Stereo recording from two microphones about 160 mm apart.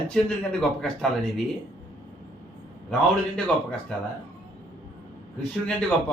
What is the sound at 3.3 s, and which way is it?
Speech, 5° left (ahead or behind).